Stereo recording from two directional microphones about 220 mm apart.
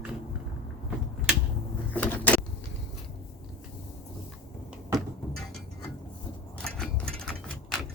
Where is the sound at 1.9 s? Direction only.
5° left (ahead or behind).